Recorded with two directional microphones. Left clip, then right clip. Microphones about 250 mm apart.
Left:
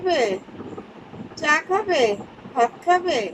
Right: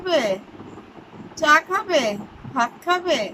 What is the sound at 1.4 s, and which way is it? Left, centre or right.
A woman's voice, right.